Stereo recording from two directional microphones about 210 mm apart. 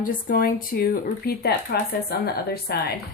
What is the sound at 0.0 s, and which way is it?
Speech, 40° left (ahead or behind).